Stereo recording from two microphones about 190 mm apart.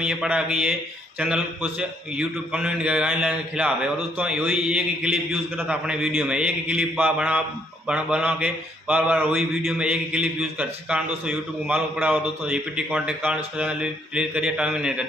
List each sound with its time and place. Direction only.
0.0 s a man's voice: 5° right (ahead or behind)